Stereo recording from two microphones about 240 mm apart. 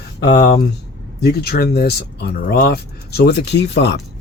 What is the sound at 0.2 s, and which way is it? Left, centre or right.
Speech, left.